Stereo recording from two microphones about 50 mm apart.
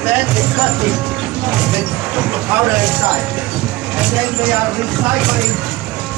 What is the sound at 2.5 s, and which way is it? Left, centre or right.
Speech, right.